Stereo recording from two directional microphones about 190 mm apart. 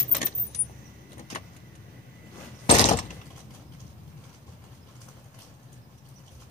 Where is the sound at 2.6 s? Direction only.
35° left (ahead or behind).